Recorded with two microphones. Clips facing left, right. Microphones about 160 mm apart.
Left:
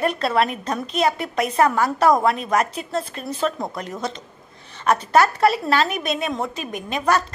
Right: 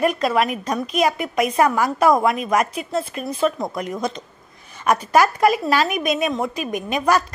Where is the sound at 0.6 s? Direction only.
15° right (ahead or behind).